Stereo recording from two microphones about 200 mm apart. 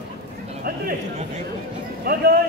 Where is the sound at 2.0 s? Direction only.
50° right (ahead or behind).